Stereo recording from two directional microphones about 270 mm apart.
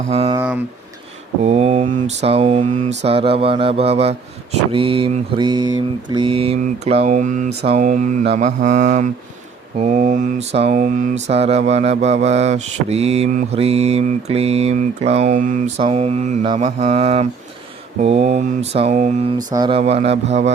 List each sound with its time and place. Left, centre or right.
0.1 s mantra: right
0.3 s speech: centre
1.4 s mantra: right
19.4 s mantra: centre